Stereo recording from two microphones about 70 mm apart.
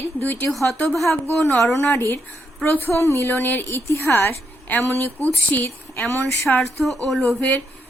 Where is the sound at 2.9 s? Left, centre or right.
Left.